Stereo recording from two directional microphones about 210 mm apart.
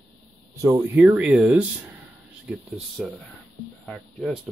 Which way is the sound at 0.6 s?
10° right (ahead or behind).